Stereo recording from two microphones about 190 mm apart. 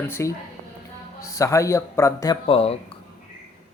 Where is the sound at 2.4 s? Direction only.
30° left (ahead or behind).